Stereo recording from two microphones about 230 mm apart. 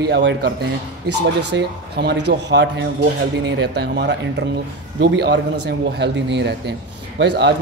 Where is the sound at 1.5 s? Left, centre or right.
Right.